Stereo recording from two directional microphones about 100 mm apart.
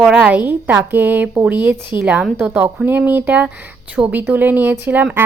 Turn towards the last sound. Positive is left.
turn(degrees=-15)  # may be behind; listen again after turning